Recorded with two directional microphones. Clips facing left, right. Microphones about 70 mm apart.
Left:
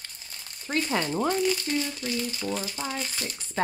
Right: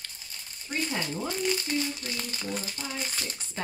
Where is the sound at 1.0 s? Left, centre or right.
Left.